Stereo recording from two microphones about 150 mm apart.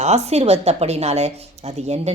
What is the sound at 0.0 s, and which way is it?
Speech, 45° right (ahead or behind).